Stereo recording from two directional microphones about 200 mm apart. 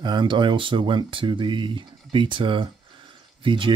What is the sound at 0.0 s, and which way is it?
Speech, 25° right (ahead or behind).